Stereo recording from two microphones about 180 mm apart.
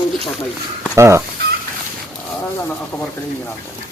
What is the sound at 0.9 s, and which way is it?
Speech, 15° right (ahead or behind).